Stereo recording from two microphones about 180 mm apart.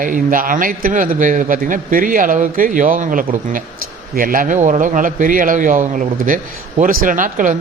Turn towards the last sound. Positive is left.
turn(degrees=-45)  # may be behind; listen again after turning